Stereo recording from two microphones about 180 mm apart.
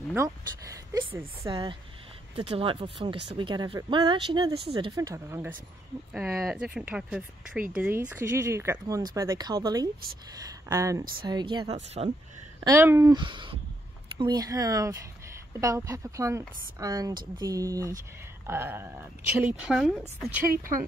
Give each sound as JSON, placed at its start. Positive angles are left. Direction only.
{"t": 0.1, "sound": "speech", "side_deg": -15}
{"t": 1.5, "sound": "speech", "side_deg": -25}
{"t": 6.1, "sound": "speech", "side_deg": -5}
{"t": 11.7, "sound": "speech", "side_deg": -35}
{"t": 12.5, "sound": "speech", "side_deg": -15}
{"t": 20.5, "sound": "speech", "side_deg": -50}